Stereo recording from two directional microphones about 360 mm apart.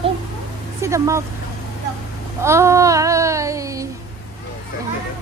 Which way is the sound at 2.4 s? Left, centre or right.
Centre.